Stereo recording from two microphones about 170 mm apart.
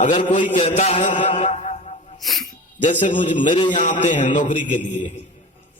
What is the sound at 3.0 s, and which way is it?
Speech, 50° left (ahead or behind).